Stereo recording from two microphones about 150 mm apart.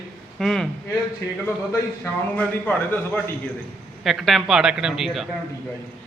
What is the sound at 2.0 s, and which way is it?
Speech, 10° left (ahead or behind).